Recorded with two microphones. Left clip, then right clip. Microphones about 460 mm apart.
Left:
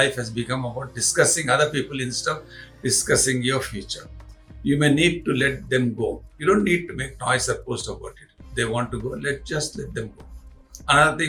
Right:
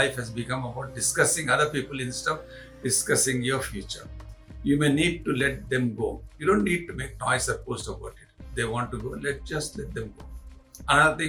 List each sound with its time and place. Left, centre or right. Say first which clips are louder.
0.0 s a man's voice: left 4 dB; right